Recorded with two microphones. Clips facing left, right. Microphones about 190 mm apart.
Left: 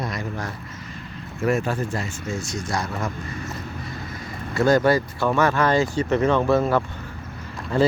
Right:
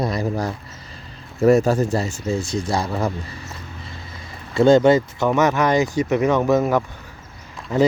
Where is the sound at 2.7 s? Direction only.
30° right (ahead or behind).